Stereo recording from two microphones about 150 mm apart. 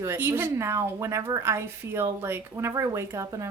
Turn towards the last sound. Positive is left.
turn(degrees=-20)  # may be behind; listen again after turning